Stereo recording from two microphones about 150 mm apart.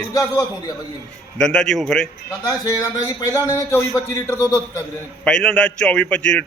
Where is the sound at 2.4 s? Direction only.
25° left (ahead or behind).